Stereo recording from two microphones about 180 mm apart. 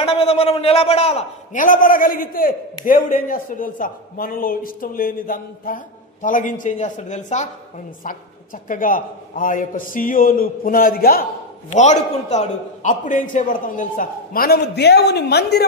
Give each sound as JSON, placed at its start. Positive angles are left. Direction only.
{"t": 0.0, "sound": "a man's voice", "side_deg": 35}
{"t": 8.6, "sound": "a man's voice", "side_deg": 50}
{"t": 11.7, "sound": "a man's voice", "side_deg": 40}